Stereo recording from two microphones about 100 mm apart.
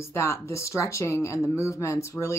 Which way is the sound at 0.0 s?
25° left (ahead or behind).